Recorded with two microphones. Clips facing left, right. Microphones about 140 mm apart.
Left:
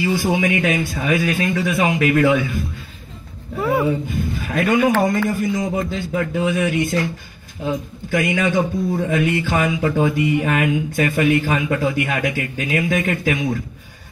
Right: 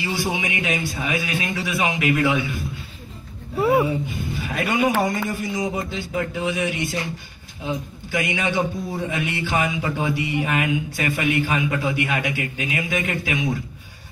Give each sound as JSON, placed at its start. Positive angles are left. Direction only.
{"t": 0.0, "sound": "speech", "side_deg": 50}
{"t": 3.5, "sound": "speech", "side_deg": -20}
{"t": 4.1, "sound": "a man's voice", "side_deg": 50}
{"t": 8.1, "sound": "speech", "side_deg": 50}